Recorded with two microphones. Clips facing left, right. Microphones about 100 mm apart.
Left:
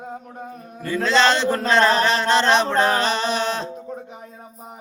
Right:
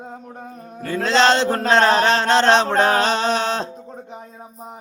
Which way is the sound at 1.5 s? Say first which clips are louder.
Right 1 dB; 50° right (ahead or behind).